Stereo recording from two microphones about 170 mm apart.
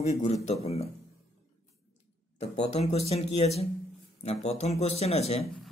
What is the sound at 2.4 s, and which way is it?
Speech, 40° left (ahead or behind).